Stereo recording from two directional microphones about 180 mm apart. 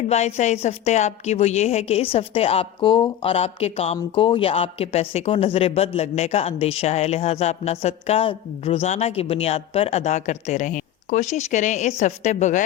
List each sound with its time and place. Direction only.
0.1 s speech: 35° left (ahead or behind)